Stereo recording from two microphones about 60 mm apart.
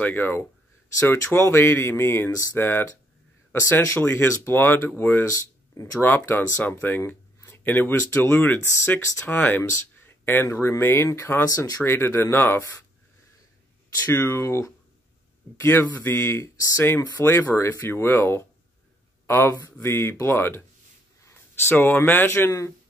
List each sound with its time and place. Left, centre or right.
0.0 s speech: left
4.0 s speech: left
5.2 s speech: left
5.9 s speech: left
9.6 s speech: left
10.0 s speech: left
11.4 s speech: left
11.8 s speech: left
14.1 s speech: left
16.2 s speech: left